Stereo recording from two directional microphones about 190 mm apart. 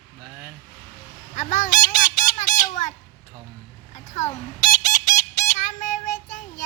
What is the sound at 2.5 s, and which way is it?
Fowl, 20° left (ahead or behind).